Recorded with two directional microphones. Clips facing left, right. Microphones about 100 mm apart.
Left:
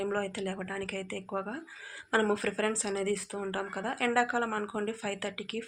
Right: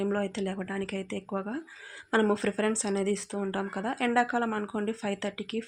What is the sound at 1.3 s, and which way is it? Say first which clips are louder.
Speech: even; 5° left (ahead or behind).